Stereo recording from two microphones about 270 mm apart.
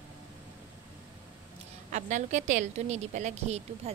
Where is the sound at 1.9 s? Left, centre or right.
Right.